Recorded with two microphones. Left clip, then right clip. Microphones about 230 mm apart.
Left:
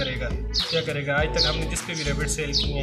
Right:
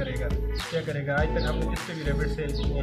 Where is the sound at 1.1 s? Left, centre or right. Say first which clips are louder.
Left 4 dB; centre.